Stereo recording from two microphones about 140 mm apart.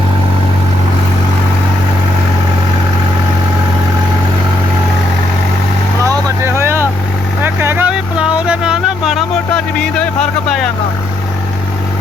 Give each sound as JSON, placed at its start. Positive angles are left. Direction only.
{"t": 6.0, "sound": "vehicle", "side_deg": -20}
{"t": 7.4, "sound": "a sound", "side_deg": -15}
{"t": 9.6, "sound": "music", "side_deg": 5}